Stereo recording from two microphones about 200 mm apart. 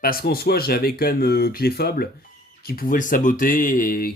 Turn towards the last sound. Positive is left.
turn(degrees=45)  # may be behind; listen again after turning